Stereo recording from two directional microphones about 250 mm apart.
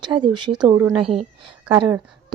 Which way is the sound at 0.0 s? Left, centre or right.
Centre.